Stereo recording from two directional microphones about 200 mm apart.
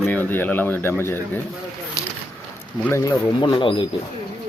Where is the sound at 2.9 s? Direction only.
15° left (ahead or behind).